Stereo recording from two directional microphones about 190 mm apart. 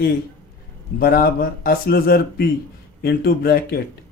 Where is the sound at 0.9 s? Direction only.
50° left (ahead or behind).